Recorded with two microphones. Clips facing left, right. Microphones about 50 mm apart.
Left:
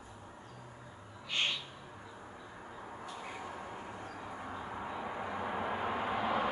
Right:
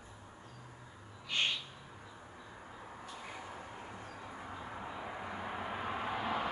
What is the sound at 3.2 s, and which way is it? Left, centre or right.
Vehicle, centre.